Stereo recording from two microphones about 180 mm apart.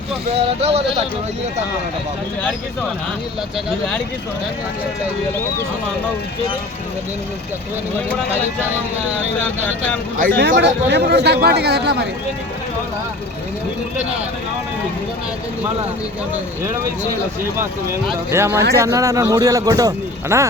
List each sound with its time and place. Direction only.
0.3 s speech: 35° right (ahead or behind)
10.2 s a man's voice: 55° right (ahead or behind)
18.3 s speech: 15° right (ahead or behind)